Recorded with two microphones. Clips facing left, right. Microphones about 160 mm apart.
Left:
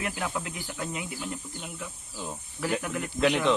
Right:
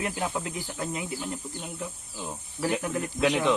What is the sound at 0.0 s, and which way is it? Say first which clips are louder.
Speech: right 2 dB; 25° right (ahead or behind).